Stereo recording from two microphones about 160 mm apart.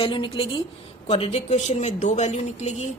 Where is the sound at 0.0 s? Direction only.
35° left (ahead or behind).